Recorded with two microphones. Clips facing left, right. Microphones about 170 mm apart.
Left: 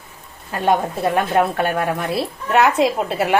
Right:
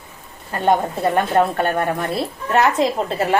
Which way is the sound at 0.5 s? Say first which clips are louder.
Right 1 dB; 5° left (ahead or behind).